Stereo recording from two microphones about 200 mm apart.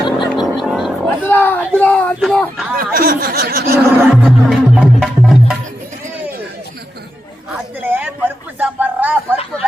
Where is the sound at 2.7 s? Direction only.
45° right (ahead or behind).